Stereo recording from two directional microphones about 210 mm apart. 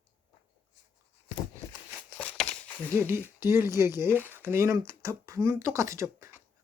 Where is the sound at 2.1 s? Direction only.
5° left (ahead or behind).